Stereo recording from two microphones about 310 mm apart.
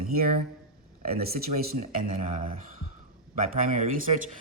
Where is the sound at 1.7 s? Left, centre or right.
Right.